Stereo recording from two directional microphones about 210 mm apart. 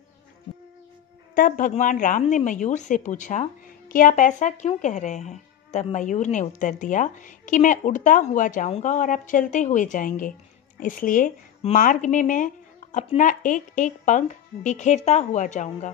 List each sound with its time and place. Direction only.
1.3 s a woman's voice: 40° left (ahead or behind)